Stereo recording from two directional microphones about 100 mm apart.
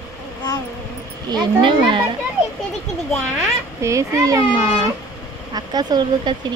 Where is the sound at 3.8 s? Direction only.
30° right (ahead or behind).